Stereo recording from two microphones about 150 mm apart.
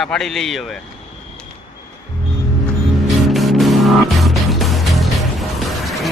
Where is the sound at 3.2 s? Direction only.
Centre (ahead or behind).